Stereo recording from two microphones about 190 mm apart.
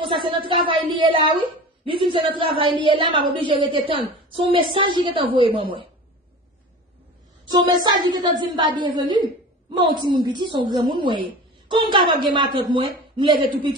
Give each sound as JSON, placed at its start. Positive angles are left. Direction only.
{"t": 0.0, "sound": "a woman's voice", "side_deg": -25}
{"t": 7.5, "sound": "a woman's voice", "side_deg": -20}
{"t": 10.2, "sound": "a woman's voice", "side_deg": -25}